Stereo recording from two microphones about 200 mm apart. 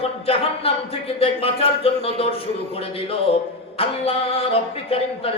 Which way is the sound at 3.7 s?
30° left (ahead or behind).